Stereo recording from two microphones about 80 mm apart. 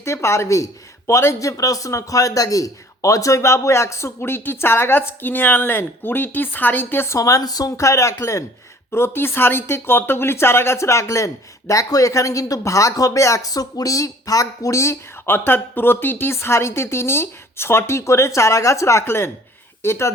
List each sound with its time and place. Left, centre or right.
0.0 s speech: left
7.2 s speech: left